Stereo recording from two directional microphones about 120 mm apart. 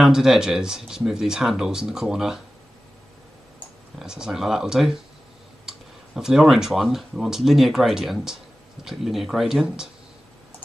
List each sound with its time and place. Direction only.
0.0 s speech: 5° right (ahead or behind)
4.0 s speech: 5° right (ahead or behind)